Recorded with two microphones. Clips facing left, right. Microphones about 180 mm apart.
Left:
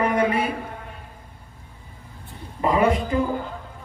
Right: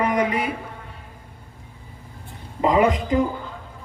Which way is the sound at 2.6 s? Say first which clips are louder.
Right 1 dB; 15° right (ahead or behind).